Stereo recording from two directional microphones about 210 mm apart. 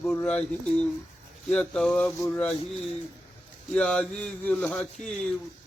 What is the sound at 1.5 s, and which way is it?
Speech, centre (ahead or behind).